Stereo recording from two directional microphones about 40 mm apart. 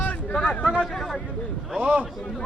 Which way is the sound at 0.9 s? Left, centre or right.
Centre.